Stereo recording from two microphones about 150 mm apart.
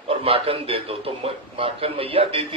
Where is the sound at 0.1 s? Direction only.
40° right (ahead or behind).